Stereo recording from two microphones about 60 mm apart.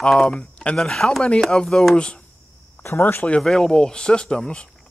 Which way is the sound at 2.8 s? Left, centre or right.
Left.